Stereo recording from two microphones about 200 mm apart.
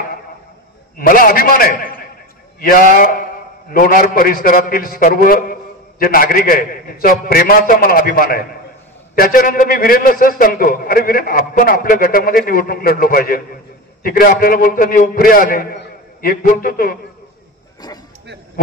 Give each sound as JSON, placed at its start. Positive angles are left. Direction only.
{"t": 0.9, "sound": "a man's voice", "side_deg": 45}
{"t": 17.8, "sound": "bow-wow", "side_deg": 20}